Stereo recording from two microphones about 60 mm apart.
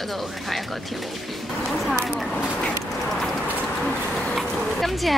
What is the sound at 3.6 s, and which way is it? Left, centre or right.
Bird, centre.